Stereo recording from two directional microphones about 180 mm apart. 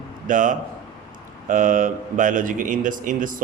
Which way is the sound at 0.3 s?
45° right (ahead or behind).